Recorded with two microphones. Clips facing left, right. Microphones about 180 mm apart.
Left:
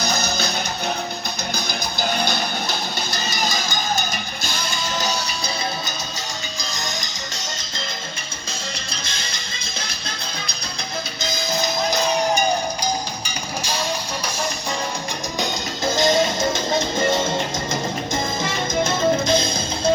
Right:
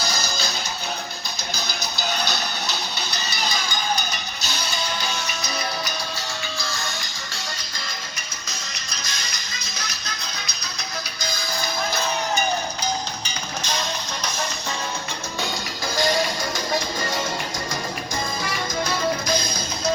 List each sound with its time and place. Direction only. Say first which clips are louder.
0.1 s music: left 5 dB; 60° left (ahead or behind)
1.5 s music: left 3 dB; 55° left (ahead or behind)
6.6 s music: even; 20° left (ahead or behind)
8.9 s music: left 2 dB; 30° left (ahead or behind)
11.2 s music: left 6 dB; 20° left (ahead or behind)
13.6 s music: left 2 dB; 10° left (ahead or behind)
15.9 s music: left 4 dB; 25° left (ahead or behind)